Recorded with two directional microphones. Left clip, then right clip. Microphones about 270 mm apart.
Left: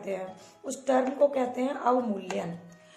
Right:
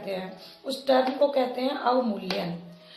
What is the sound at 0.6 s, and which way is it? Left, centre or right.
A woman's voice, left.